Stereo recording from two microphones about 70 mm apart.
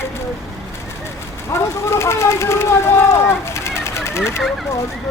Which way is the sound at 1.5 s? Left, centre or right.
Left.